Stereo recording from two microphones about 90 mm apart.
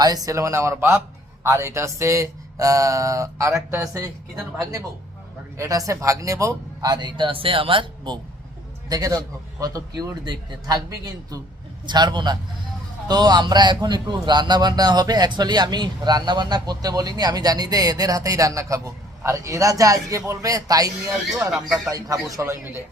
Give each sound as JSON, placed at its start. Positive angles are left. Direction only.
{"t": 0.0, "sound": "speech", "side_deg": -45}
{"t": 5.5, "sound": "speech", "side_deg": -40}
{"t": 6.9, "sound": "speech", "side_deg": -60}
{"t": 8.9, "sound": "speech", "side_deg": -40}
{"t": 11.9, "sound": "a man's voice", "side_deg": -55}